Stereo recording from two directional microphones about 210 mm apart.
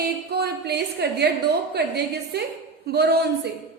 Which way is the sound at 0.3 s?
50° right (ahead or behind).